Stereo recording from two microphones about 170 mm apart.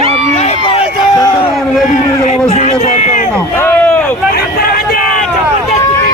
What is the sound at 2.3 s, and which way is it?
Run, 40° left (ahead or behind).